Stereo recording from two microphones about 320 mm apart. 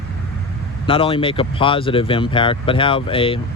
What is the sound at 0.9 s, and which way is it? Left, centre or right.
Speech, centre.